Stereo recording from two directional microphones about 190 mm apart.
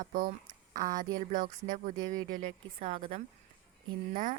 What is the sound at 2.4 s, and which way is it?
Speech, 35° right (ahead or behind).